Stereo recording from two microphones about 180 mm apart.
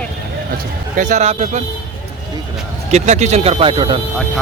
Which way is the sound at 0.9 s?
40° right (ahead or behind).